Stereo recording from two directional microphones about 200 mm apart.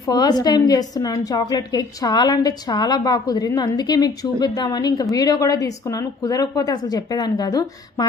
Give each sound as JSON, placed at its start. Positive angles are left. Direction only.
{"t": 0.1, "sound": "a woman's voice", "side_deg": 20}